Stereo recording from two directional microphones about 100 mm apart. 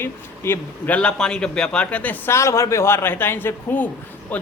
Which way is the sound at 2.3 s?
30° left (ahead or behind).